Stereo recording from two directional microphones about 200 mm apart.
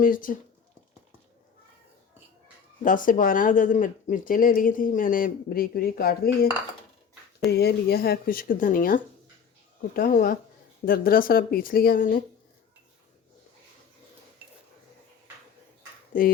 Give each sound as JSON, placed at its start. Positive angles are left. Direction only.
{"t": 0.0, "sound": "speech", "side_deg": 45}
{"t": 2.8, "sound": "speech", "side_deg": 40}
{"t": 7.5, "sound": "speech", "side_deg": 55}